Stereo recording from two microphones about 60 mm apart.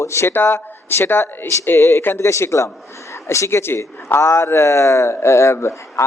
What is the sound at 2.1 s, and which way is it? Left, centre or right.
Speech, left.